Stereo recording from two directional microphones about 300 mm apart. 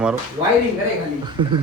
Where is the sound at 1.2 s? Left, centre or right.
Centre.